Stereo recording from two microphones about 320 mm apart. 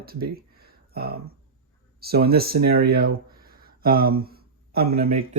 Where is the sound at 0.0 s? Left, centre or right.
Right.